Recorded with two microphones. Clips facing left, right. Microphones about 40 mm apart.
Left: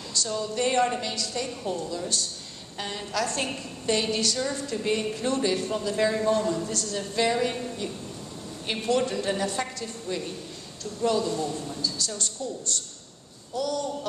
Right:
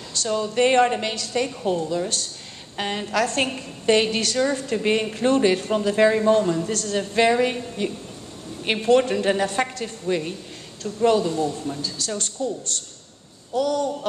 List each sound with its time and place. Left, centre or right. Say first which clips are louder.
0.1 s a woman's voice: right 5 dB; right